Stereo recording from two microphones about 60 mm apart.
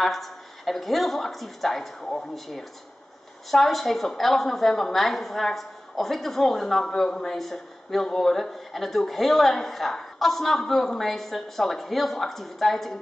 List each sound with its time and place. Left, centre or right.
0.0 s a woman's voice: centre